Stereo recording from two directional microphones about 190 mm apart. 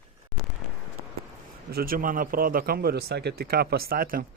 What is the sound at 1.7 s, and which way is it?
Speech, 50° right (ahead or behind).